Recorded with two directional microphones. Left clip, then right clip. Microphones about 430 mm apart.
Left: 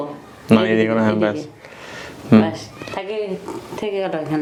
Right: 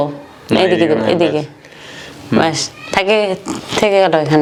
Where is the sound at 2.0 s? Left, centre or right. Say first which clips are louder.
Right 1 dB; left.